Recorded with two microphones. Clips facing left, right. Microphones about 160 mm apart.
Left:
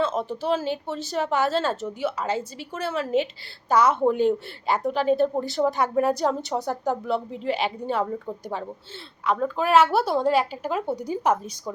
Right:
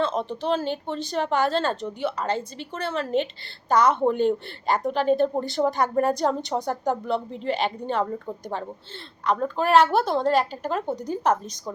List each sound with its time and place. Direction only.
0.0 s a woman's voice: 5° left (ahead or behind)